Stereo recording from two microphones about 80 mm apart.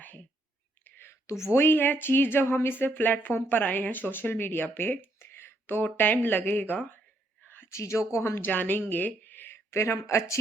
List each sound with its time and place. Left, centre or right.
0.0 s whispering: left
0.9 s a woman's voice: left
8.4 s a woman's voice: left